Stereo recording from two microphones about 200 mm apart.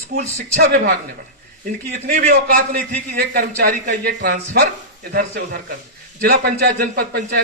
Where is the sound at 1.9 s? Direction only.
50° right (ahead or behind).